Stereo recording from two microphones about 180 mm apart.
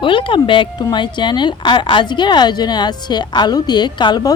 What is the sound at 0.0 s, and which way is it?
A woman's voice, 30° left (ahead or behind).